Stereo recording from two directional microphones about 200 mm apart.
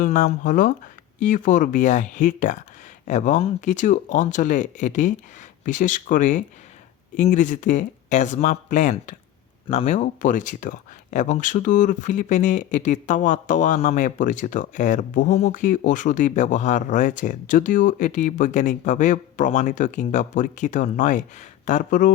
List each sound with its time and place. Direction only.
0.0 s speech: 40° left (ahead or behind)